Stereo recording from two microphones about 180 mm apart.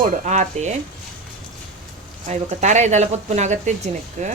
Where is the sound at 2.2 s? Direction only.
40° right (ahead or behind).